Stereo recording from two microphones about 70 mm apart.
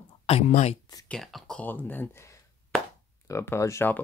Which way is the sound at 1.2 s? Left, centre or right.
Centre.